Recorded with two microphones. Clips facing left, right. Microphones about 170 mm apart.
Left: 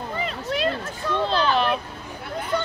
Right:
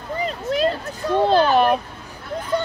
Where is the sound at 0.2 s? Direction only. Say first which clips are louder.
Right 5 dB; 40° right (ahead or behind).